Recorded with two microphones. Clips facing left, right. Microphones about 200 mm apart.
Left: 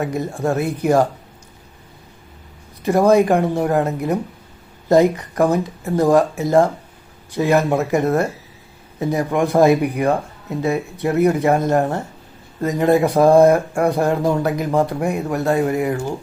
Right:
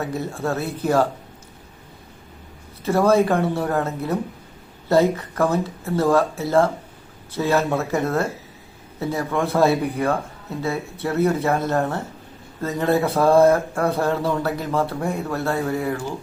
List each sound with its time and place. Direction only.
0.0 s speech: 15° left (ahead or behind)
2.8 s speech: 15° left (ahead or behind)